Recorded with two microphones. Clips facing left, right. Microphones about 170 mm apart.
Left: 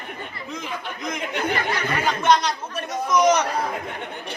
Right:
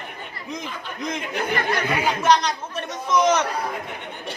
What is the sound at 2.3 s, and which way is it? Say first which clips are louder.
A man's voice: even; 10° left (ahead or behind).